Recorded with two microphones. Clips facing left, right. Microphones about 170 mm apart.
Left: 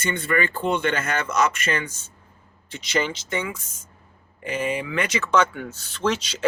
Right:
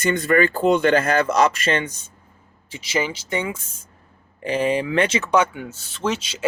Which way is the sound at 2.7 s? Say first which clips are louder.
Right 1 dB; 5° right (ahead or behind).